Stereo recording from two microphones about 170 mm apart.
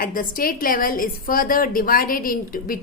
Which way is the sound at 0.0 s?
55° left (ahead or behind).